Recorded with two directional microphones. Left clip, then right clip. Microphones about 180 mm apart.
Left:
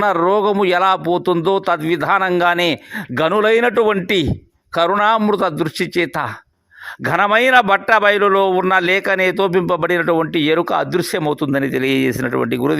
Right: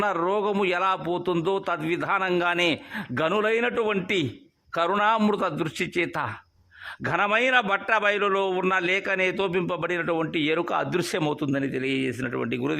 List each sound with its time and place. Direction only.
0.0 s a man's voice: 30° left (ahead or behind)